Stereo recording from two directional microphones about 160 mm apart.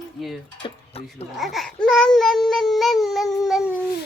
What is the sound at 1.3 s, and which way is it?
Child singing, centre (ahead or behind).